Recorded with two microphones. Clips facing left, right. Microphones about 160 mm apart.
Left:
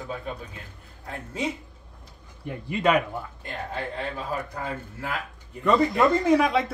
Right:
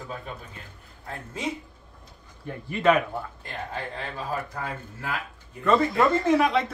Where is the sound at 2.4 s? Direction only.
15° left (ahead or behind).